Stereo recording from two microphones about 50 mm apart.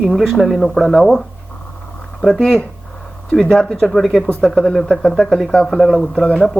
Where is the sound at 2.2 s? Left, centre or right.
Centre.